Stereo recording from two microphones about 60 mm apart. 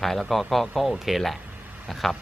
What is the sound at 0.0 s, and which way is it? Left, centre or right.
A man's voice, centre.